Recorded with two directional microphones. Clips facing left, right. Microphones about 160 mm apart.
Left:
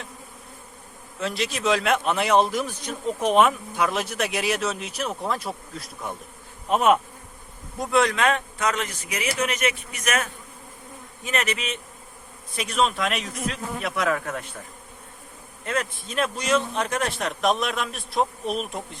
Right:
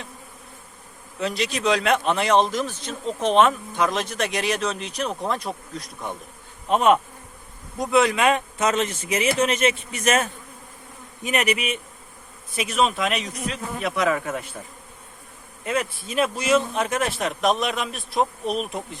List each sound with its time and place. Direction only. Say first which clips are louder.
1.2 s speech: right 2 dB; centre (ahead or behind)
8.5 s a man's voice: right 4 dB; 25° right (ahead or behind)
11.2 s insect: right 4 dB; 15° right (ahead or behind)
12.5 s speech: right 1 dB; centre (ahead or behind)
15.6 s speech: right 2 dB; 10° right (ahead or behind)